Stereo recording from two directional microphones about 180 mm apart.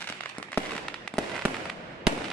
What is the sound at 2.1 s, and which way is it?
Fireworks, 5° right (ahead or behind).